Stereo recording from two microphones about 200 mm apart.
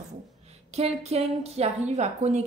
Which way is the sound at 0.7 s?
30° right (ahead or behind).